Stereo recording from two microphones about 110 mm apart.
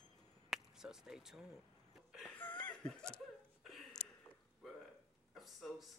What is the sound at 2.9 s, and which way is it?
Laughter, 10° left (ahead or behind).